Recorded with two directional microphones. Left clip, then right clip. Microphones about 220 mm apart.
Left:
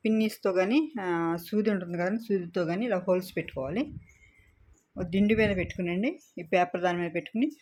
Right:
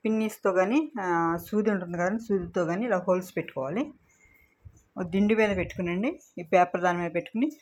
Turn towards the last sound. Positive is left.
turn(degrees=10)  # may be behind; listen again after turning